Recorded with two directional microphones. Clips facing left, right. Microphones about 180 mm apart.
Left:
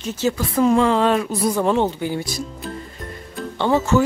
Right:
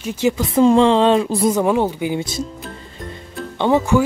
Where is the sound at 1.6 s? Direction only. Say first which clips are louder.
Right 2 dB; 10° right (ahead or behind).